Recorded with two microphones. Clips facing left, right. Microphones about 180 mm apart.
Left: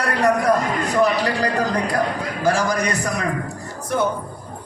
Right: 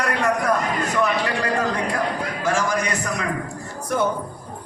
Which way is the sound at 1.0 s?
35° left (ahead or behind).